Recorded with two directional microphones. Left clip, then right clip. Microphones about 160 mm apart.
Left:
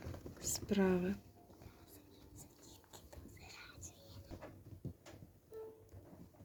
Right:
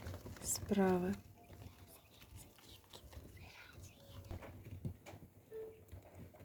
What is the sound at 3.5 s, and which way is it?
Whispering, 45° left (ahead or behind).